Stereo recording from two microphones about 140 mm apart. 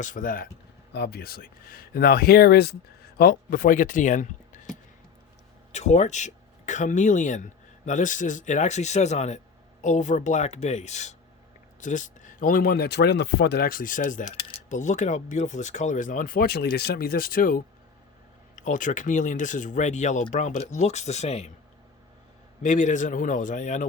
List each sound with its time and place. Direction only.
0.0 s coin: 70° left (ahead or behind)
1.2 s speech: 90° left; by 4.6 s 65° left (ahead or behind)
5.7 s speech: 55° left (ahead or behind); by 12.9 s 85° left
13.6 s coin: 90° left
18.5 s speech: 65° left (ahead or behind)
22.6 s speech: 60° left (ahead or behind)